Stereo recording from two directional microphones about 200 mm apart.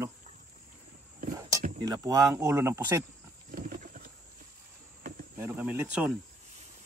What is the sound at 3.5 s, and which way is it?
Wild animals, 45° right (ahead or behind).